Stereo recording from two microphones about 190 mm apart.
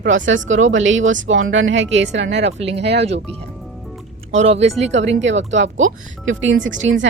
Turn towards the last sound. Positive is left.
turn(degrees=-85)